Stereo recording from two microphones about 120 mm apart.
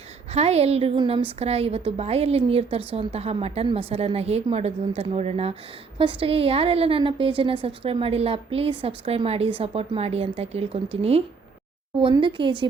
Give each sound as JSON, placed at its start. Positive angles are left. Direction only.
{"t": 0.3, "sound": "a woman's voice", "side_deg": -60}
{"t": 6.0, "sound": "a woman's voice", "side_deg": -50}
{"t": 12.2, "sound": "a woman's voice", "side_deg": -45}